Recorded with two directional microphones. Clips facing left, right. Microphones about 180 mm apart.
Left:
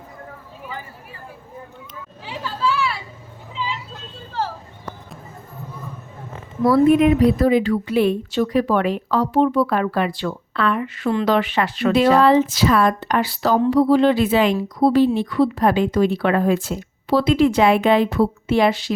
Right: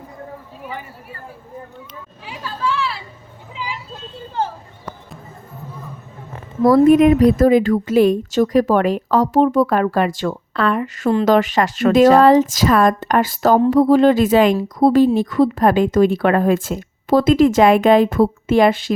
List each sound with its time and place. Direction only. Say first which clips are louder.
2.6 s vehicle: even; 5° left (ahead or behind)
3.5 s vehicle: left 2 dB; 10° right (ahead or behind)
6.7 s a woman's voice: right 3 dB; 40° right (ahead or behind)